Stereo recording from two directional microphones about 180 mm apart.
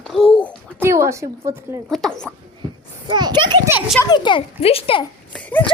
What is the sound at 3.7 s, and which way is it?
Speech, 5° right (ahead or behind).